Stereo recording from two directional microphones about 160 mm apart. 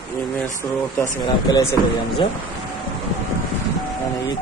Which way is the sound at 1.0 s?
25° left (ahead or behind).